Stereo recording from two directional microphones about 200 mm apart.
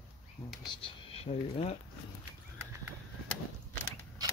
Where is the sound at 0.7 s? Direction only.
25° left (ahead or behind).